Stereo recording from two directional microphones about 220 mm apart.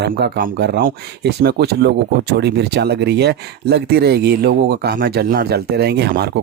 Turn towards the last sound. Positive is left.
turn(degrees=-45)  # may be behind; listen again after turning